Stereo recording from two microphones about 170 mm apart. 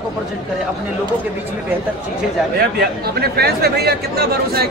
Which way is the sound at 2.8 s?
65° right (ahead or behind).